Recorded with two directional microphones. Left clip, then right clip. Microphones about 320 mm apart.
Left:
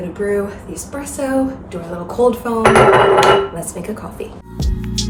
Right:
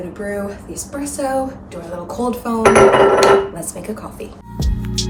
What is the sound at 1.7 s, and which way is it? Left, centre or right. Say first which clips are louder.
Speech: left 2 dB; centre.